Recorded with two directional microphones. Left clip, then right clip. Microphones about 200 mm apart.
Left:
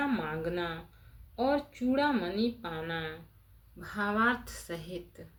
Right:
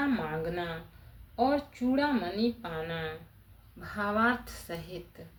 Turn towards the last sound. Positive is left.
turn(degrees=25)  # may be behind; listen again after turning